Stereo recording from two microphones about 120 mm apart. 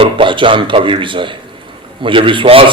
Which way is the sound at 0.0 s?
45° right (ahead or behind).